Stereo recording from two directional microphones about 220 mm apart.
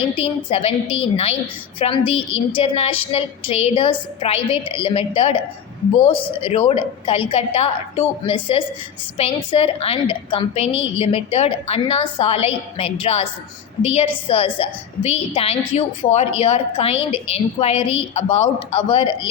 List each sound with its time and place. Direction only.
0.2 s a woman's voice: 25° left (ahead or behind)